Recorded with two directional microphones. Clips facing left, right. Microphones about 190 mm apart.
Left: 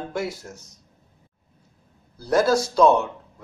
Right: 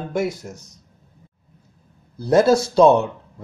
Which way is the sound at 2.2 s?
25° right (ahead or behind).